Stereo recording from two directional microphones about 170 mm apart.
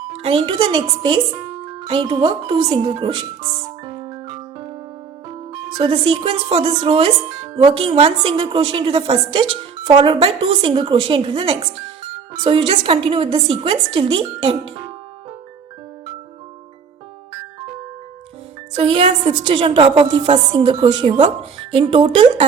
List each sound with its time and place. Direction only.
0.1 s a woman's voice: 35° right (ahead or behind)
3.8 s music: 30° right (ahead or behind)
5.5 s a woman's voice: 30° right (ahead or behind)
18.8 s a woman's voice: 30° right (ahead or behind)